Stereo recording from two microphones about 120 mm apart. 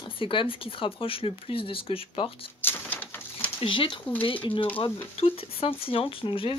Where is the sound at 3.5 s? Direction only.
45° left (ahead or behind).